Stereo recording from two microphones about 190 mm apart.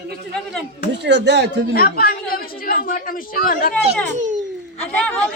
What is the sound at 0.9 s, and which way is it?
Speech, 65° right (ahead or behind).